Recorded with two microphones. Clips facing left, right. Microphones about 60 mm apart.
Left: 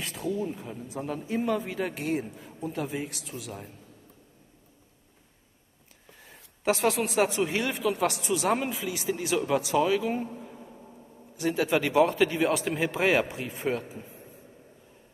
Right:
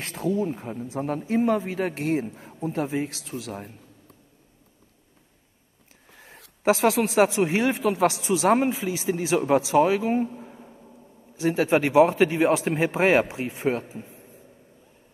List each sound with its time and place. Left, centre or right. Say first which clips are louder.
0.0 s a sound: right 5 dB; right
0.5 s speech: right 5 dB; right
6.1 s a sound: right 5 dB; right
7.3 s speech: right 5 dB; right
12.5 s speech: right 4 dB; right
12.9 s speech: right 4 dB; right